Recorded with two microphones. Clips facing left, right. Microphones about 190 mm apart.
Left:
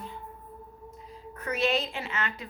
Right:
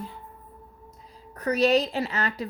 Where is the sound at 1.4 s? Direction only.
40° right (ahead or behind).